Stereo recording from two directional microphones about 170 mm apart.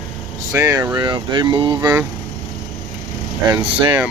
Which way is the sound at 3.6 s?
30° right (ahead or behind).